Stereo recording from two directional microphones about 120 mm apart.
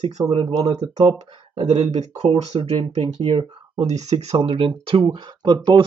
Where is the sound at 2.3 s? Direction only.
50° right (ahead or behind).